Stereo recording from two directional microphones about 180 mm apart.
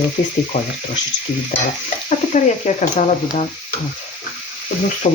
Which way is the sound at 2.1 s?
40° left (ahead or behind).